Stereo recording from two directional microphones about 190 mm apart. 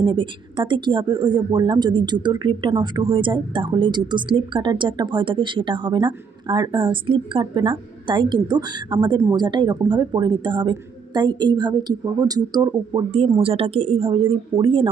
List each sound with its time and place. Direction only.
0.0 s speech: 25° right (ahead or behind)